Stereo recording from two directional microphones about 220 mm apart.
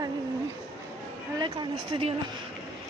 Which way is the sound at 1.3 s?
20° right (ahead or behind).